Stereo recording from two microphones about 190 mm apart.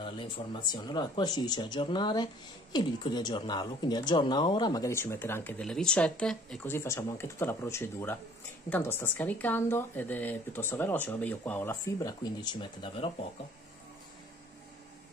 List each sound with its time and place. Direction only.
0.0 s speech: 25° left (ahead or behind)